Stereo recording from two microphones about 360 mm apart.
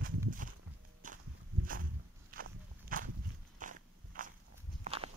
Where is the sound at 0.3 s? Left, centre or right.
Right.